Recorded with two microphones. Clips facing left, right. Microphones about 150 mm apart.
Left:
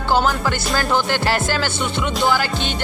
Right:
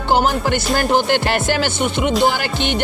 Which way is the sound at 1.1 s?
20° right (ahead or behind).